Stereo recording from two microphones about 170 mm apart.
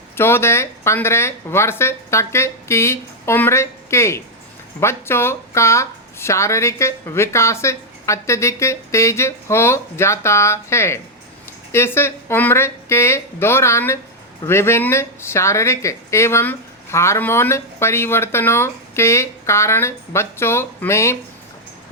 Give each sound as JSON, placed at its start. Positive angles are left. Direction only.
{"t": 0.2, "sound": "speech", "side_deg": 15}